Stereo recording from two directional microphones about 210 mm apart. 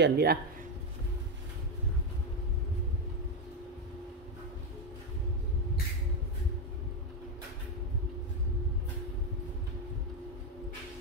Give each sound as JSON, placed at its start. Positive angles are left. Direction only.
{"t": 0.0, "sound": "speech", "side_deg": -50}